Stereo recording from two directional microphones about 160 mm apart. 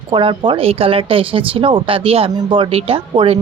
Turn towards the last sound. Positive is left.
turn(degrees=-35)  # may be behind; listen again after turning